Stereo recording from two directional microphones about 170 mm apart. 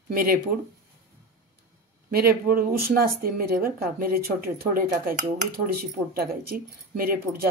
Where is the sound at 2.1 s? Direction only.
65° right (ahead or behind).